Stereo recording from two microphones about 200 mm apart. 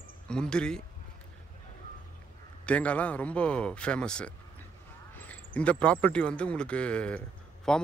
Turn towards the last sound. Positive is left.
turn(degrees=5)  # may be behind; listen again after turning